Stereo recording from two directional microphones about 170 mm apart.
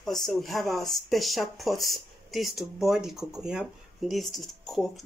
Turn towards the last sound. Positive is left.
turn(degrees=0)  # may be behind; listen again after turning